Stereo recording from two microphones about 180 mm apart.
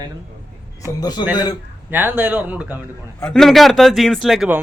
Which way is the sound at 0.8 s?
20° left (ahead or behind).